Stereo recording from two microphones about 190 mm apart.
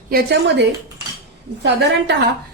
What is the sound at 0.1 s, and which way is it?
A woman's voice, 60° right (ahead or behind).